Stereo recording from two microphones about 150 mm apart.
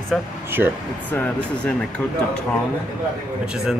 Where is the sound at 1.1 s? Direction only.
10° left (ahead or behind).